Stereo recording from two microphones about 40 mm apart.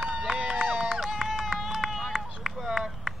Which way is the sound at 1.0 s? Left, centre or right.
Centre.